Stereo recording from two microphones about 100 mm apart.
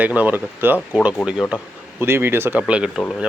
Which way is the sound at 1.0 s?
10° right (ahead or behind).